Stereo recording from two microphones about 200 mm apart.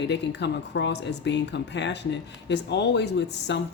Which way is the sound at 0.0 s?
60° left (ahead or behind).